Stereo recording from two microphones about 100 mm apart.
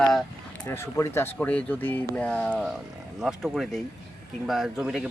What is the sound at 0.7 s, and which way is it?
Speech, 25° left (ahead or behind).